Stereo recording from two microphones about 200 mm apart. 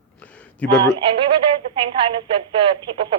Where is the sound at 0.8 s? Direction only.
25° right (ahead or behind).